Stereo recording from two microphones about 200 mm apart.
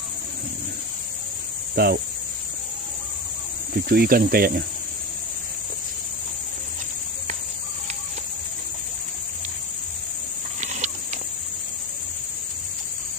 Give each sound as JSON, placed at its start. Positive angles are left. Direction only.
{"t": 1.8, "sound": "cricket", "side_deg": -50}
{"t": 3.7, "sound": "cricket", "side_deg": -50}
{"t": 10.6, "sound": "a sound", "side_deg": -35}